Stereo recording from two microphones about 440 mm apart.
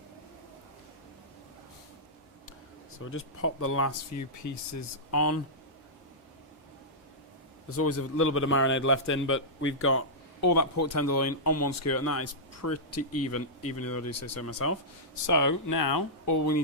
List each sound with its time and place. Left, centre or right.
3.0 s speech: left
7.7 s a man's voice: left